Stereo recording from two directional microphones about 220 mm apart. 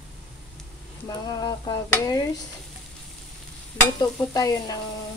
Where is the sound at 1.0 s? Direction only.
20° left (ahead or behind).